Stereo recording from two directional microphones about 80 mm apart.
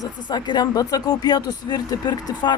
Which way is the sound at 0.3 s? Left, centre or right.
Left.